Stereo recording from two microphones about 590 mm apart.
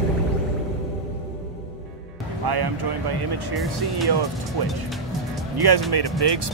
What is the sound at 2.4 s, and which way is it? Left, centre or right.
Speech, right.